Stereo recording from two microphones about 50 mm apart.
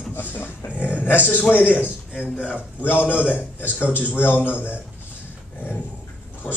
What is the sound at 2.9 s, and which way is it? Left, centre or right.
A man's voice, left.